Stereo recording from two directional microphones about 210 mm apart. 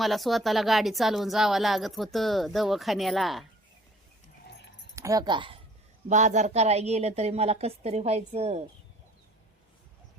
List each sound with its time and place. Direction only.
0.0 s a woman's voice: centre (ahead or behind)
4.9 s speech: 15° right (ahead or behind)
6.1 s a woman's voice: 35° right (ahead or behind)